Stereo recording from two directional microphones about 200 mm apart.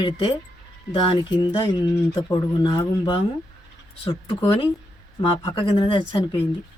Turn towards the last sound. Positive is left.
turn(degrees=25)  # may be behind; listen again after turning